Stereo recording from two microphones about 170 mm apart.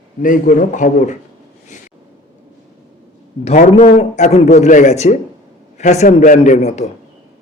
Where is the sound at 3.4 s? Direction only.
45° left (ahead or behind).